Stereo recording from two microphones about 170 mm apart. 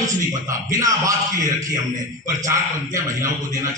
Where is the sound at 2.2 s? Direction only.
20° right (ahead or behind).